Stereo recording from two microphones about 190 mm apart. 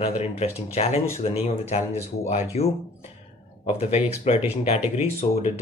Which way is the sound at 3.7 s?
35° left (ahead or behind).